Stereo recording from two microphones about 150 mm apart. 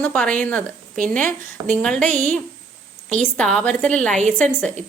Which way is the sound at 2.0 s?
55° right (ahead or behind).